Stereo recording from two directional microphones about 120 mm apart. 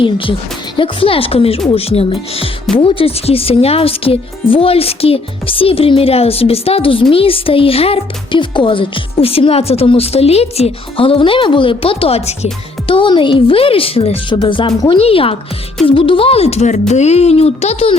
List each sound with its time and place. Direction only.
0.8 s speech: 50° left (ahead or behind)
12.9 s speech: 45° left (ahead or behind); by 17.9 s 60° left (ahead or behind)